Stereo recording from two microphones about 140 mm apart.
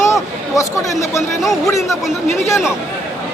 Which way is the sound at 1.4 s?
Centre (ahead or behind).